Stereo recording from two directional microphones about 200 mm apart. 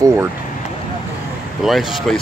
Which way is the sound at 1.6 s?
Centre (ahead or behind).